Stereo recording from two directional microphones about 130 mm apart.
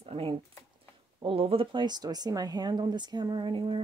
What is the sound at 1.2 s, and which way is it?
Speech, 45° right (ahead or behind).